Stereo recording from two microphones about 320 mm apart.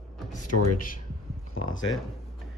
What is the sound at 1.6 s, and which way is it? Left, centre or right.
Speech, left.